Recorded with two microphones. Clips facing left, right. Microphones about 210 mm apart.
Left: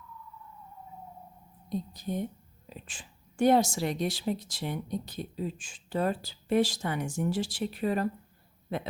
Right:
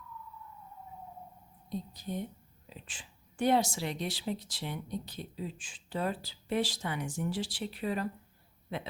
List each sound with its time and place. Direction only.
1.9 s a woman's voice: 45° left (ahead or behind)